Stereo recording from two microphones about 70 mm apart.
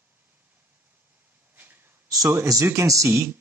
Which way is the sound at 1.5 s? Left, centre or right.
Right.